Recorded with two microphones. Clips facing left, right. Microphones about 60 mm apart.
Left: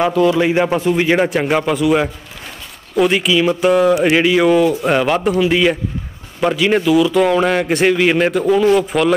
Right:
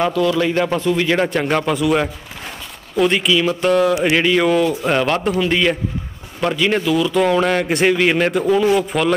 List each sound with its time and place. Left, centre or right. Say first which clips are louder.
0.2 s a man's voice: left 3 dB; left; by 9.1 s centre